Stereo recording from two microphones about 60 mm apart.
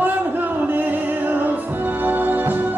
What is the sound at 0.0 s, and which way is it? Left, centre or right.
Music, right.